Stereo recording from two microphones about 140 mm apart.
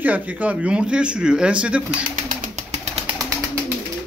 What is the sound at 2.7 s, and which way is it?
Pigeon, 45° right (ahead or behind).